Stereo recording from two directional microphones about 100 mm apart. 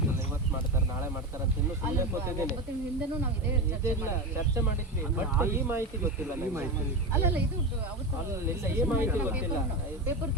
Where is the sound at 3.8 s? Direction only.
25° right (ahead or behind).